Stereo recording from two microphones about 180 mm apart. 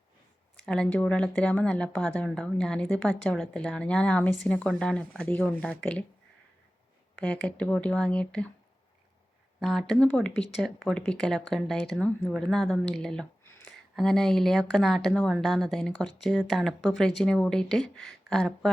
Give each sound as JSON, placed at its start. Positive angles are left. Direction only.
{"t": 0.6, "sound": "a woman's voice", "side_deg": 5}
{"t": 7.4, "sound": "speech", "side_deg": 5}
{"t": 9.6, "sound": "a woman's voice", "side_deg": 0}